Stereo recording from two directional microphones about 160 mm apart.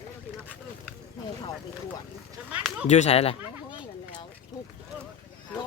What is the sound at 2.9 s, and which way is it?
Speech, 45° left (ahead or behind).